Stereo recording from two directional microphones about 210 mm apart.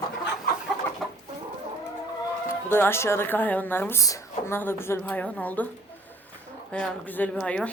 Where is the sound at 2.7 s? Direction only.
10° left (ahead or behind).